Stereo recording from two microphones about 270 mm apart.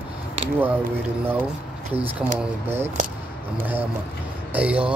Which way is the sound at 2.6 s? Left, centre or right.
Right.